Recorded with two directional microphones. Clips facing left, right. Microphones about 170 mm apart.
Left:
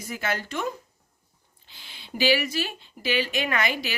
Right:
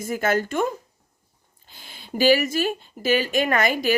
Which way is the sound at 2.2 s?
45° right (ahead or behind).